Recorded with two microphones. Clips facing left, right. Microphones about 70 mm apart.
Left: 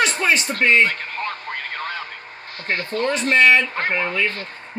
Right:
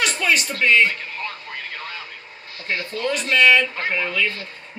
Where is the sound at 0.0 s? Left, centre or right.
Left.